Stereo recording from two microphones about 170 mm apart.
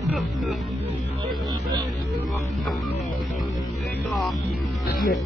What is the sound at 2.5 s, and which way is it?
Music, centre (ahead or behind).